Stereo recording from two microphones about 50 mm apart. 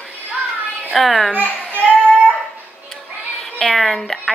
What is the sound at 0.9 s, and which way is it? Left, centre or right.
Speech, centre.